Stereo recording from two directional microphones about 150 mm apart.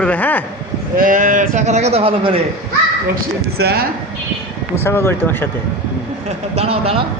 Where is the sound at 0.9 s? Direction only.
60° right (ahead or behind); by 2.4 s 40° right (ahead or behind).